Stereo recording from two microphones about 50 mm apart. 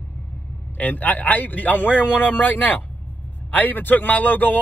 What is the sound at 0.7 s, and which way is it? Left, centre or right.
Speech, left.